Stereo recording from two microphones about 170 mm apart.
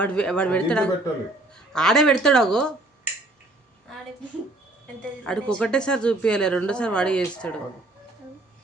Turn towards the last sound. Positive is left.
turn(degrees=5)  # may be behind; listen again after turning